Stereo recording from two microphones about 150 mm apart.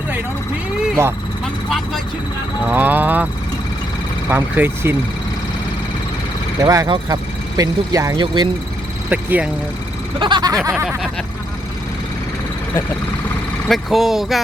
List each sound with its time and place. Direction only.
1.0 s speech: 20° right (ahead or behind)
2.6 s speech: 10° right (ahead or behind)
4.3 s speech: 10° right (ahead or behind)
6.6 s speech: 25° right (ahead or behind)
9.0 s speech: 10° right (ahead or behind)
10.2 s speech: 30° right (ahead or behind)
13.7 s speech: centre (ahead or behind)